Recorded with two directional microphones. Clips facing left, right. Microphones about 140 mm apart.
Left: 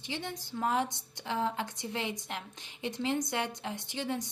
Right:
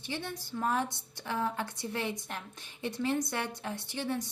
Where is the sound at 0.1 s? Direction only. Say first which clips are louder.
Right 1 dB; 20° left (ahead or behind).